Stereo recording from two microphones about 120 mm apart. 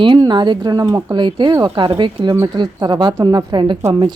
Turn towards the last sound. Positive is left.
turn(degrees=-45)  # may be behind; listen again after turning